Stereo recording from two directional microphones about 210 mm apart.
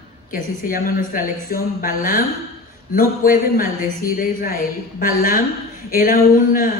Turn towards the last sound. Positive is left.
turn(degrees=40)  # may be behind; listen again after turning